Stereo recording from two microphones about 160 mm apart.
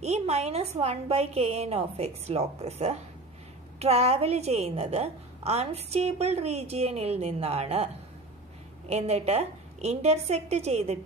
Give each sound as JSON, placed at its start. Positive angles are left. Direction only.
{"t": 0.0, "sound": "a woman's voice", "side_deg": -40}